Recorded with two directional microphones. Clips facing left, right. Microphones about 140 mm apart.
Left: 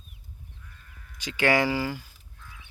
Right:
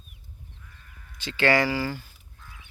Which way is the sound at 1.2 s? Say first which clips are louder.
Right 1 dB; 15° left (ahead or behind).